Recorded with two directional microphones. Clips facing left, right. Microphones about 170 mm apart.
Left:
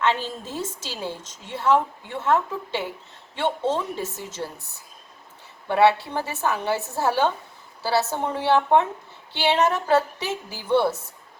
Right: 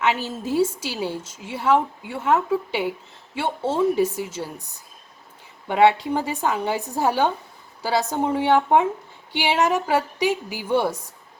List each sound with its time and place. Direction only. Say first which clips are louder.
0.0 s a woman's voice: right 1 dB; 10° right (ahead or behind)
5.6 s a woman's voice: right 1 dB; 15° right (ahead or behind)